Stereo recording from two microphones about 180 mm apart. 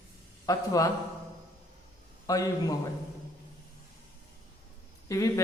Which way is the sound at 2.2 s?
20° left (ahead or behind).